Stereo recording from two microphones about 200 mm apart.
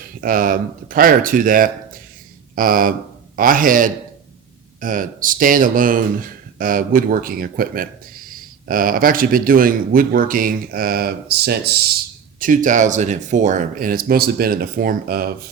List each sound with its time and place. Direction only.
0.2 s speech: 45° right (ahead or behind)
12.4 s speech: 40° right (ahead or behind)